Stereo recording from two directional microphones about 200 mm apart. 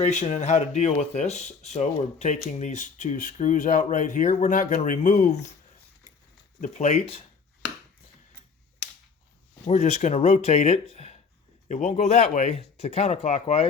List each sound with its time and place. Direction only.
0.0 s speech: 35° left (ahead or behind)
6.6 s speech: 35° left (ahead or behind)
9.6 s speech: 35° left (ahead or behind)